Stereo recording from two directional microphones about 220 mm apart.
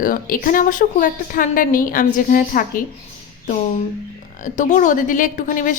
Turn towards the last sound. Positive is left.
turn(degrees=35)  # may be behind; listen again after turning